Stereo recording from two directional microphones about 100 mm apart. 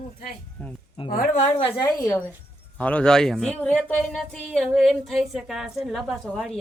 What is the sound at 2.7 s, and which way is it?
Speech, 15° left (ahead or behind).